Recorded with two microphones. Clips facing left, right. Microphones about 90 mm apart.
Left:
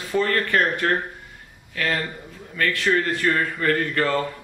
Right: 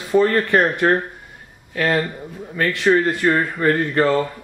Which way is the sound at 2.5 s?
25° right (ahead or behind).